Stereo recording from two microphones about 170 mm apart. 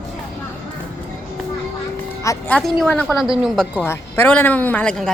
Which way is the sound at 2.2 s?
15° left (ahead or behind).